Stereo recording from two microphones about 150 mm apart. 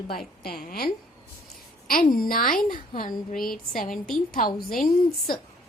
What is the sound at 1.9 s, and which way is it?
A woman's voice, 70° left (ahead or behind).